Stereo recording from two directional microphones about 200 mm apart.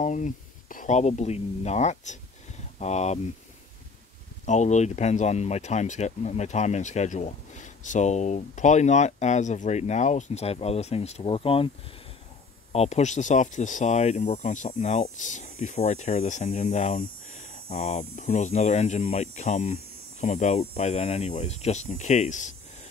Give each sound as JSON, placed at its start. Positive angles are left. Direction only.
{"t": 0.0, "sound": "speech", "side_deg": 35}
{"t": 4.5, "sound": "speech", "side_deg": 35}
{"t": 12.7, "sound": "speech", "side_deg": 35}